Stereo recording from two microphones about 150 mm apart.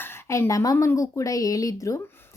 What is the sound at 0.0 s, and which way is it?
Speech, 15° left (ahead or behind).